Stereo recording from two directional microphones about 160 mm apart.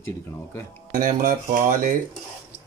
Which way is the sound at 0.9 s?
60° right (ahead or behind).